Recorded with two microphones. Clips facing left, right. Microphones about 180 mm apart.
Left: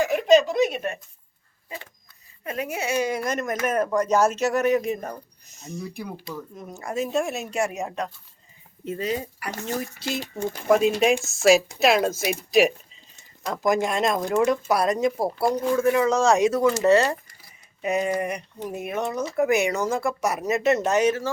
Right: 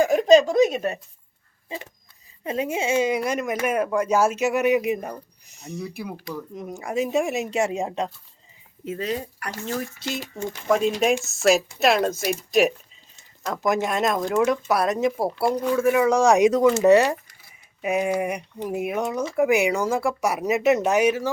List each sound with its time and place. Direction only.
0.0 s speech: 40° right (ahead or behind)
2.4 s speech: 25° right (ahead or behind)
8.8 s speech: centre (ahead or behind)
15.8 s speech: 10° right (ahead or behind)